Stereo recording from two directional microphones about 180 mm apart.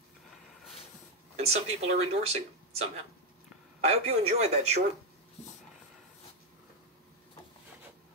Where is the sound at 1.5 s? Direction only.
35° right (ahead or behind).